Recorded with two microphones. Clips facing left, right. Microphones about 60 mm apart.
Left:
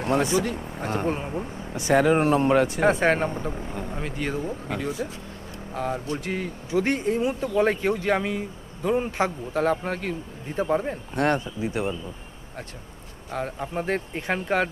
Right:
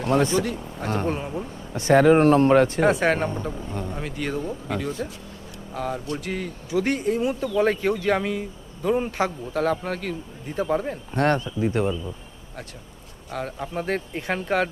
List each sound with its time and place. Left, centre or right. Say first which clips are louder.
0.2 s a man's voice: right 1 dB; centre
7.6 s a man's voice: right 1 dB; centre
13.3 s a man's voice: even; centre